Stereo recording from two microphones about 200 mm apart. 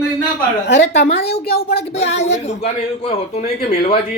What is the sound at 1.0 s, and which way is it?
Speech, 55° left (ahead or behind).